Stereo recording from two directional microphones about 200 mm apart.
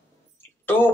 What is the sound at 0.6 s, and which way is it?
Speech, 10° left (ahead or behind).